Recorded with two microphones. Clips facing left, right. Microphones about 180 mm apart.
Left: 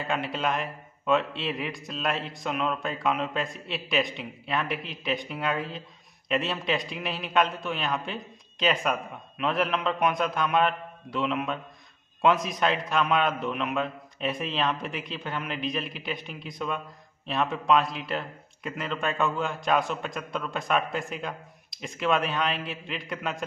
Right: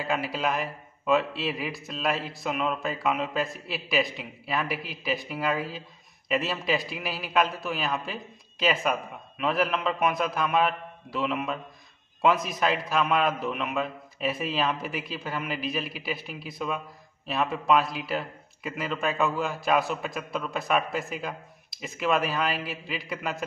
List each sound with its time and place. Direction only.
0.0 s a man's voice: 5° right (ahead or behind)